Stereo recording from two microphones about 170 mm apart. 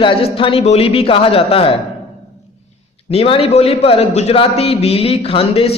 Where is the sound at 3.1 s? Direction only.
35° left (ahead or behind).